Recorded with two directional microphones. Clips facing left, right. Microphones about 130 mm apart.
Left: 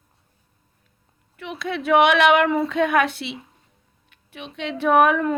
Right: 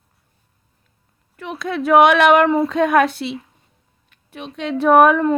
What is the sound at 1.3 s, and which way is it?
Speech, 40° right (ahead or behind).